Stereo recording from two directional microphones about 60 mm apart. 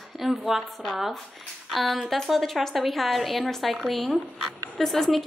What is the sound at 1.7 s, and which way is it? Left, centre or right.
A woman's voice, centre.